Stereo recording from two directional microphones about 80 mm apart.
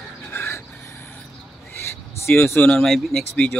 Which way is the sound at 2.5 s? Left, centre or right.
Centre.